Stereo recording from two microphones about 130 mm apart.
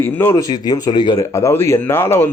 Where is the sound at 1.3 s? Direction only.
20° left (ahead or behind).